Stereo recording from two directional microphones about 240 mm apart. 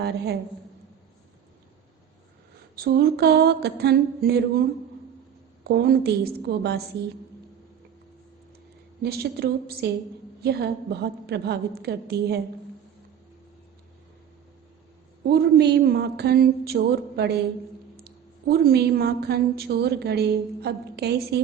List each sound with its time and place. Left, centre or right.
2.7 s a woman's voice: right
5.6 s a woman's voice: right
9.0 s a woman's voice: right
15.2 s a woman's voice: right